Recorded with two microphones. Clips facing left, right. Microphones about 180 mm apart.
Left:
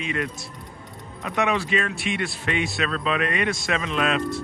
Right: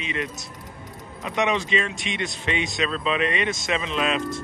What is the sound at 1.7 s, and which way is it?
Speech, 55° left (ahead or behind).